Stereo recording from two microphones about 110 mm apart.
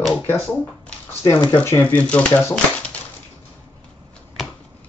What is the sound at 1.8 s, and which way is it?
Speech, 10° left (ahead or behind).